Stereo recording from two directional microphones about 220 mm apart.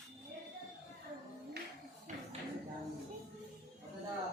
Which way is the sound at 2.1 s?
35° right (ahead or behind).